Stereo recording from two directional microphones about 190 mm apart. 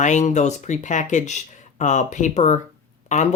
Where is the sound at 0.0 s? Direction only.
40° left (ahead or behind).